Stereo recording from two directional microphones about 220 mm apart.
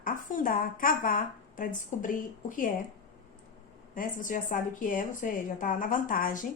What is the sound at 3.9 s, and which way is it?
Speech, 35° left (ahead or behind).